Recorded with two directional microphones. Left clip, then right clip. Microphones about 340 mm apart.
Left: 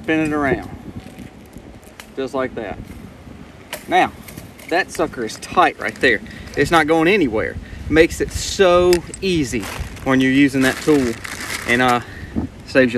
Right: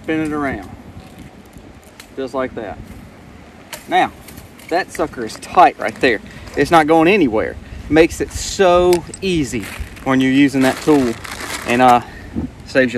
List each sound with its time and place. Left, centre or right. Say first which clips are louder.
0.0 s speech: left 1 dB; centre
2.1 s speech: right 1 dB; centre
3.7 s vehicle: even; centre
4.6 s speech: even; centre
9.6 s speech: left 1 dB; centre
10.0 s speech: right 1 dB; centre
12.6 s a sound: even; centre